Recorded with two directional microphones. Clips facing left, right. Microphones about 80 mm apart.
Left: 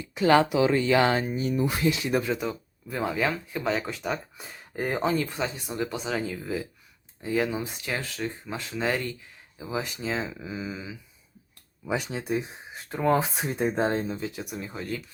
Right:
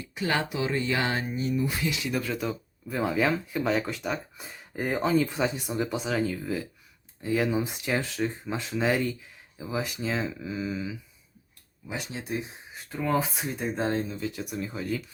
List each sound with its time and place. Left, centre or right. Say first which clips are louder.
0.2 s speech: left 8 dB; left
1.8 s speech: left 5 dB; left
2.4 s speech: even; centre
5.3 s speech: right 3 dB; centre
7.6 s speech: right 3 dB; centre
9.6 s speech: even; centre
11.9 s speech: left 5 dB; left
12.9 s speech: left 3 dB; left
14.3 s speech: right 2 dB; centre